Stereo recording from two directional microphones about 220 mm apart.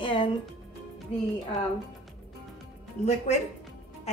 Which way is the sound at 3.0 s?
30° left (ahead or behind).